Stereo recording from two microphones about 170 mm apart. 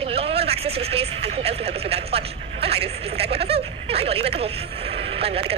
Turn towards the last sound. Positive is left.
turn(degrees=-35)  # may be behind; listen again after turning